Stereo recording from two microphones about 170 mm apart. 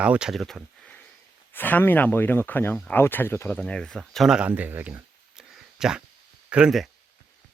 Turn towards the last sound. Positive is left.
turn(degrees=-5)  # may be behind; listen again after turning